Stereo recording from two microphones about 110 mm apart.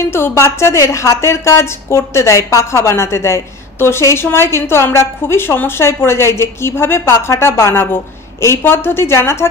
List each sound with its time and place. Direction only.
0.0 s speech: 25° left (ahead or behind)